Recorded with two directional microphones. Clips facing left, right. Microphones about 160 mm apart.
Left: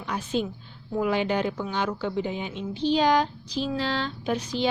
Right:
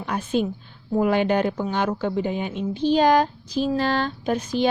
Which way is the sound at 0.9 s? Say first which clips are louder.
Right 5 dB; 50° right (ahead or behind).